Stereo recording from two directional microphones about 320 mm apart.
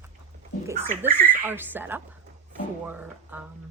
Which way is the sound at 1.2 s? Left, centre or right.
Centre.